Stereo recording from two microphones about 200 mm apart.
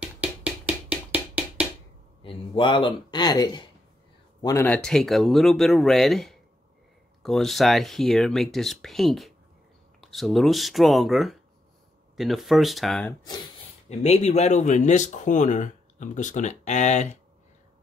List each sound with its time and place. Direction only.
0.0 s percussion: 5° right (ahead or behind)
2.2 s speech: 25° left (ahead or behind)
4.6 s speech: 5° left (ahead or behind)
13.8 s speech: 30° left (ahead or behind)